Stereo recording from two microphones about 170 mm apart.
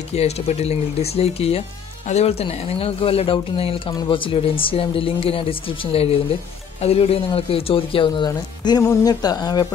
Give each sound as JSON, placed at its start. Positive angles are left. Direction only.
{"t": 0.1, "sound": "speech", "side_deg": 40}